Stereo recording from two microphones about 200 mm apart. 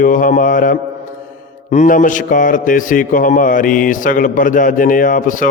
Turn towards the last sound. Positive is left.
turn(degrees=40)  # may be behind; listen again after turning